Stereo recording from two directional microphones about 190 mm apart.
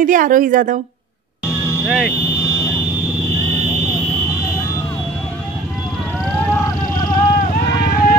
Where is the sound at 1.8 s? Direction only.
Centre (ahead or behind).